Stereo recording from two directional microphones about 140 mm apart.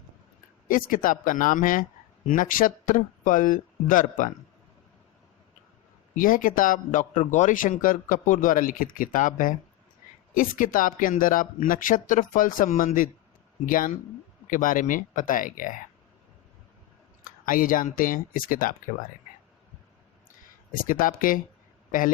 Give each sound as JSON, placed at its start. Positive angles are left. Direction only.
{"t": 0.7, "sound": "speech", "side_deg": 80}
{"t": 6.1, "sound": "speech", "side_deg": 80}
{"t": 17.4, "sound": "speech", "side_deg": 75}
{"t": 20.8, "sound": "speech", "side_deg": 75}